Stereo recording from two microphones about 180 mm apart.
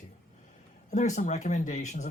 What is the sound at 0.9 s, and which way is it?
Speech, 40° left (ahead or behind).